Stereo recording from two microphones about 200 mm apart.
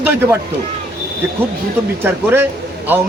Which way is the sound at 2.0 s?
10° right (ahead or behind).